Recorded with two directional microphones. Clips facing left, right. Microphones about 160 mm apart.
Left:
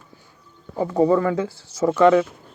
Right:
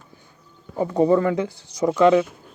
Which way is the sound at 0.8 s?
20° right (ahead or behind).